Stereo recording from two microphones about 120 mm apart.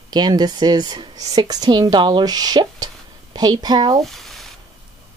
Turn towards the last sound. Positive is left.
turn(degrees=0)  # may be behind; listen again after turning